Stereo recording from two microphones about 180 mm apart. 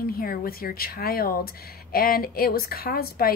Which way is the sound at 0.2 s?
55° left (ahead or behind).